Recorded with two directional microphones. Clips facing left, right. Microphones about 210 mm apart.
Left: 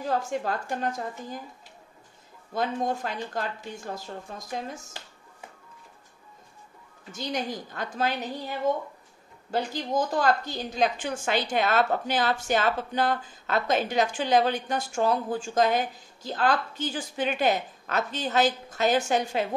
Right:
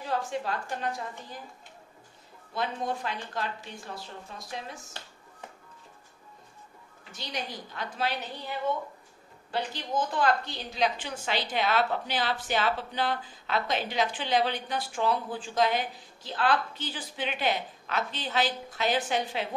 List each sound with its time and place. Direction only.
0.0 s a woman's voice: 45° left (ahead or behind)
2.5 s a woman's voice: 45° left (ahead or behind)
7.1 s a woman's voice: 45° left (ahead or behind)
9.5 s a woman's voice: 45° left (ahead or behind)